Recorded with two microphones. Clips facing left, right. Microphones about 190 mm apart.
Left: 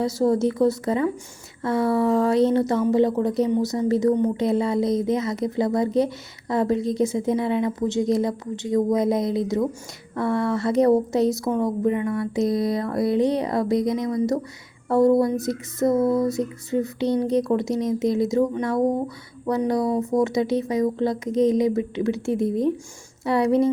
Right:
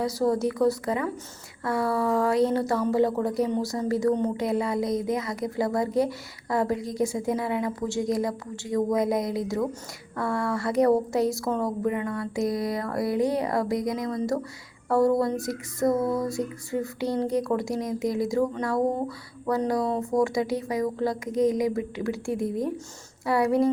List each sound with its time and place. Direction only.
0.0 s a woman's voice: 25° left (ahead or behind)